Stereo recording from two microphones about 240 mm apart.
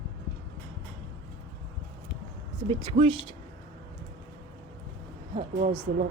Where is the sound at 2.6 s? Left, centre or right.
Right.